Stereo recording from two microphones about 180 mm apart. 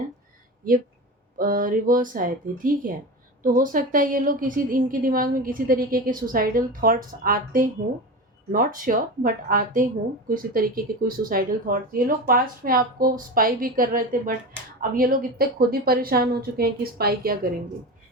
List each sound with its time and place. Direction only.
1.4 s speech: 50° right (ahead or behind)